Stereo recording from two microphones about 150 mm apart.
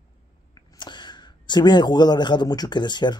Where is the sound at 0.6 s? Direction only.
30° left (ahead or behind).